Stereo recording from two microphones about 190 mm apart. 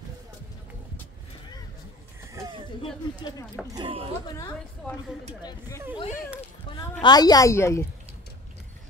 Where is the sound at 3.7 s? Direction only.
25° right (ahead or behind).